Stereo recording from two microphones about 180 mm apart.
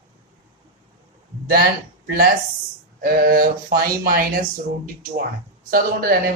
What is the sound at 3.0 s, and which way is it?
Speech, 50° right (ahead or behind).